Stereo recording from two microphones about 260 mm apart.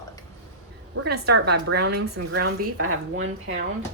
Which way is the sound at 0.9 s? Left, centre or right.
Right.